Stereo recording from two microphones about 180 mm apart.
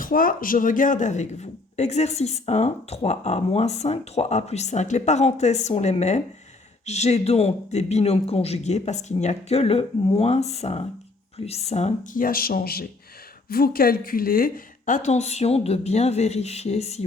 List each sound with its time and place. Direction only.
0.0 s speech: 50° left (ahead or behind); by 17.0 s 35° left (ahead or behind)